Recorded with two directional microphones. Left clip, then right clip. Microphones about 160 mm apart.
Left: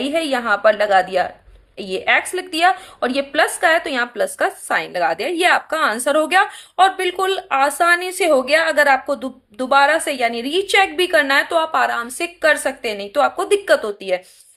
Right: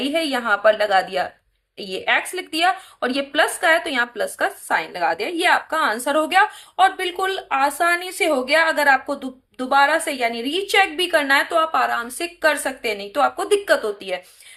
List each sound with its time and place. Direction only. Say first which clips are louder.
0.0 s a woman's voice: left 2 dB; 30° left (ahead or behind)